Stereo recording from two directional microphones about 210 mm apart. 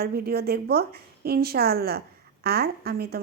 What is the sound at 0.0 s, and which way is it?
A woman's voice, 45° right (ahead or behind).